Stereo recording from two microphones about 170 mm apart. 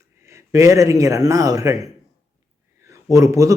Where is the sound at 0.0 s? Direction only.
15° right (ahead or behind).